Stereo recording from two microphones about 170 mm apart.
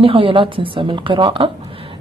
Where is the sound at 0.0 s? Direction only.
30° right (ahead or behind).